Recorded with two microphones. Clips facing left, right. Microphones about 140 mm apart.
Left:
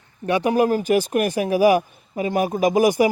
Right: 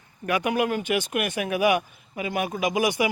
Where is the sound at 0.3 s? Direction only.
30° left (ahead or behind).